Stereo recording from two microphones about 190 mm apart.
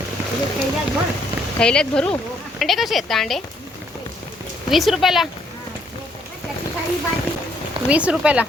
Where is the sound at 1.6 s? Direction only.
5° left (ahead or behind).